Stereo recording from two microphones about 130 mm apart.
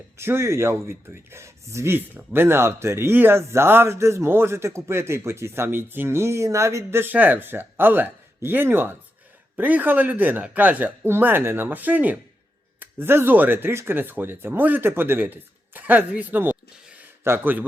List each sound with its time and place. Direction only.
0.2 s speech: 20° right (ahead or behind)